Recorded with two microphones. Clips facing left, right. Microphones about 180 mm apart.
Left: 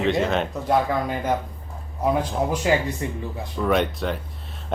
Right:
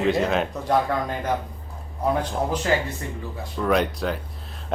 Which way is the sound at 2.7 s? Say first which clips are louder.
Left 2 dB; 15° left (ahead or behind).